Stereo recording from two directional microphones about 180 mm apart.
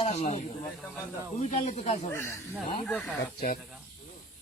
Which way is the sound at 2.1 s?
15° left (ahead or behind).